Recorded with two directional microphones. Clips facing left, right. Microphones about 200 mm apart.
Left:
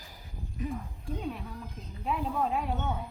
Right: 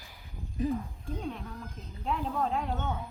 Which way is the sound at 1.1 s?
5° left (ahead or behind).